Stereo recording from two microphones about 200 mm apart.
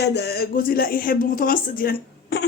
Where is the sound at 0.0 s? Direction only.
55° left (ahead or behind).